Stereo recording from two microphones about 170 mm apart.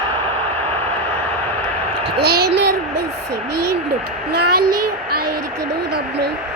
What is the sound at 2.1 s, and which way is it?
Speech, 70° right (ahead or behind).